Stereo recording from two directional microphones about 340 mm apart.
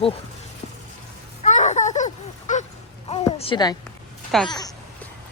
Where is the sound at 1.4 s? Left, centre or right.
Left.